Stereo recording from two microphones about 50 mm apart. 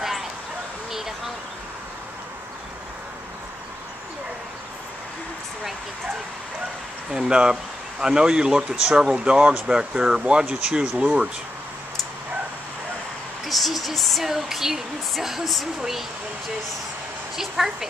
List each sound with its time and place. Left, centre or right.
7.1 s speech: centre
13.5 s speech: centre
17.4 s speech: centre